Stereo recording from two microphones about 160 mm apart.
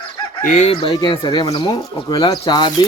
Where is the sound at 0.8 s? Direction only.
30° left (ahead or behind).